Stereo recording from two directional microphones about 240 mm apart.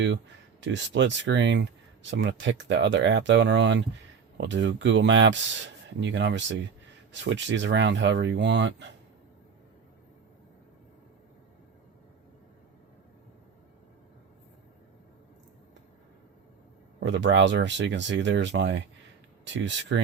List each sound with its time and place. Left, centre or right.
0.6 s speech: right
17.0 s speech: right